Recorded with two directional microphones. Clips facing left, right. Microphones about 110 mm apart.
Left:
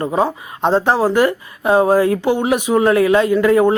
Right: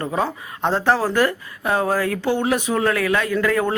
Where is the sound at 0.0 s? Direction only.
20° left (ahead or behind).